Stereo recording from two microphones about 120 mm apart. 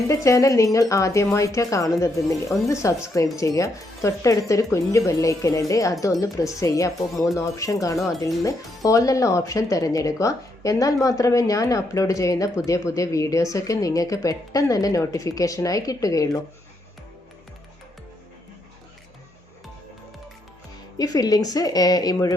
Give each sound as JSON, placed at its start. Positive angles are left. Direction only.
{"t": 0.1, "sound": "speech", "side_deg": 25}
{"t": 7.9, "sound": "speech", "side_deg": 0}
{"t": 8.2, "sound": "speech", "side_deg": 30}
{"t": 21.0, "sound": "speech", "side_deg": 30}